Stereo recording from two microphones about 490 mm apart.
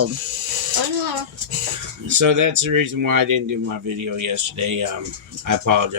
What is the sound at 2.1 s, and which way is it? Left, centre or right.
Speech, right.